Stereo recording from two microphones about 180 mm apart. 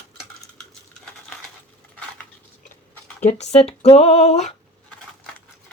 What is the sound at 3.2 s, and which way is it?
Speech, 35° left (ahead or behind).